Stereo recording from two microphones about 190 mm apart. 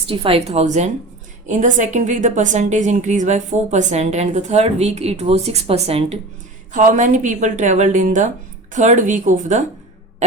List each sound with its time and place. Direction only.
0.1 s a woman's voice: 30° right (ahead or behind)